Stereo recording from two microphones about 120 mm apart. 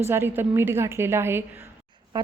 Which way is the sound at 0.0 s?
20° right (ahead or behind).